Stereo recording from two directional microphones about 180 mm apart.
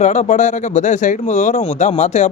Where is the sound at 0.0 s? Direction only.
40° left (ahead or behind).